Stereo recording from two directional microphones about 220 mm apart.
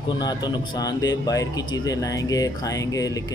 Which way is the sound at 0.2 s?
20° left (ahead or behind).